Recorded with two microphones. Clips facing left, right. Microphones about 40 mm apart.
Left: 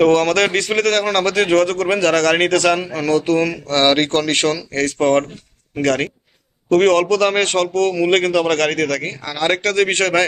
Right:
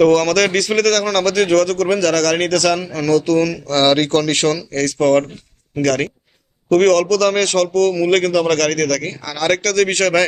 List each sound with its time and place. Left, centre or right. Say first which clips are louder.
0.0 s speech: right 1 dB; left